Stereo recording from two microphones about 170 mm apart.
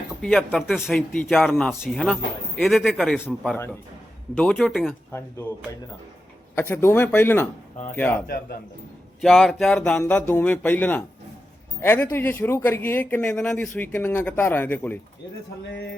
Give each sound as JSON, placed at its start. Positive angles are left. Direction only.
{"t": 0.2, "sound": "speech", "side_deg": 0}
{"t": 6.6, "sound": "speech", "side_deg": 15}
{"t": 9.2, "sound": "speech", "side_deg": 0}